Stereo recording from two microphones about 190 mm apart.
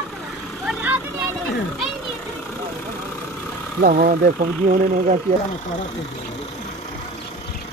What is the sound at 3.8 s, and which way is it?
Speech, 50° right (ahead or behind).